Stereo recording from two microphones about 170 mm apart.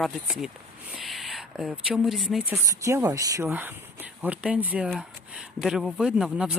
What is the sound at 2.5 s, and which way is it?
Speech, 15° right (ahead or behind).